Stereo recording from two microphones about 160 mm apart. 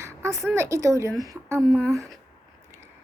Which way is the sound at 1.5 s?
Centre (ahead or behind).